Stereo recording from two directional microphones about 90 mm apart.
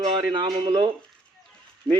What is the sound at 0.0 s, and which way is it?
Speech, 65° right (ahead or behind).